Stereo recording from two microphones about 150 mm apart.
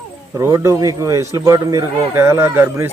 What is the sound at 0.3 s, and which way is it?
A man's voice, 20° right (ahead or behind).